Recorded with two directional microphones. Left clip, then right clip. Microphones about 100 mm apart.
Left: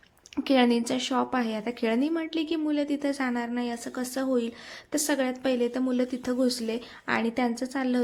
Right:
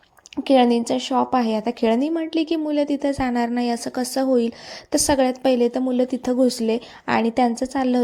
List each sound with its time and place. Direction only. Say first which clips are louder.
0.4 s a woman's voice: right 7 dB; 35° right (ahead or behind)
1.3 s speech: right 8 dB; 45° right (ahead or behind)
3.3 s a woman's voice: right 9 dB; 90° right; by 8.0 s 50° right (ahead or behind)